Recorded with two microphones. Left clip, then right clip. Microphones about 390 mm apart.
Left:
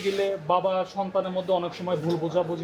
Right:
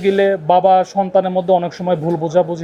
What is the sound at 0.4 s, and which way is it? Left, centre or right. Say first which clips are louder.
Speech: right 13 dB; right.